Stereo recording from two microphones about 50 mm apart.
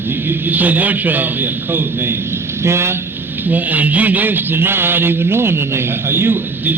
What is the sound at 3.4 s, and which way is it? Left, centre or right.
Speech, right.